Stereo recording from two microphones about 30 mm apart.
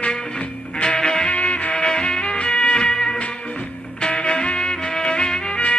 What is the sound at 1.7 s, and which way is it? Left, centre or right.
Music, left.